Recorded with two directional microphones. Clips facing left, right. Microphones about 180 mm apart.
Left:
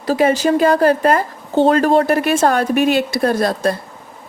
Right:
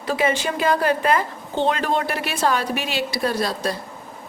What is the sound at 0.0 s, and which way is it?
A woman's voice, 40° left (ahead or behind).